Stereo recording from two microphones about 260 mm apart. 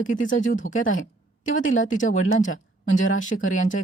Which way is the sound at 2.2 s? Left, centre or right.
Left.